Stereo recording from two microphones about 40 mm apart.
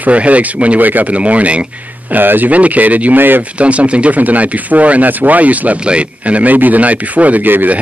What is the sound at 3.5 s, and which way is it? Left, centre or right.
Speech, right.